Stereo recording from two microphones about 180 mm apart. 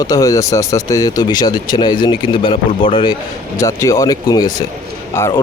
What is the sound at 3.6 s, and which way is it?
Speech, 15° left (ahead or behind).